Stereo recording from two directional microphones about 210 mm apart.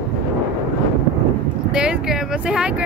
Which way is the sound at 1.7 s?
5° right (ahead or behind).